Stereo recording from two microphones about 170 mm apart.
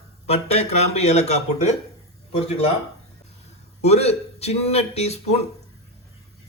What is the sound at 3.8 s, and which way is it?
Speech, 40° left (ahead or behind).